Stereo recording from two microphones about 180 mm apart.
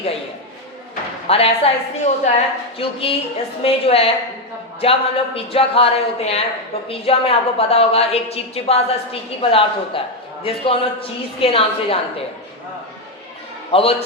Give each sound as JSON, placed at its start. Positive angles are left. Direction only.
{"t": 1.3, "sound": "a woman's voice", "side_deg": 35}
{"t": 13.7, "sound": "a man's voice", "side_deg": 30}